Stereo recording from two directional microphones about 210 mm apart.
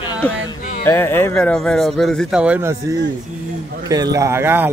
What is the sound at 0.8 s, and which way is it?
Speech, 10° left (ahead or behind).